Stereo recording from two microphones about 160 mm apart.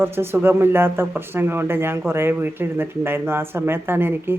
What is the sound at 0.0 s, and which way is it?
Speech, 15° right (ahead or behind).